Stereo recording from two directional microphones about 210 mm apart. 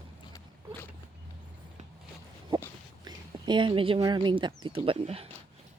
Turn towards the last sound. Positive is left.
turn(degrees=-25)  # may be behind; listen again after turning